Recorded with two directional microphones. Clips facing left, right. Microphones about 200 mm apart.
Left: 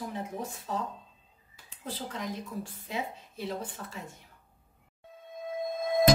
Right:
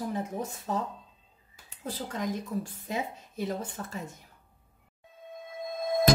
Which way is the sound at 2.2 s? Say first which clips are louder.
Right 8 dB; 45° right (ahead or behind).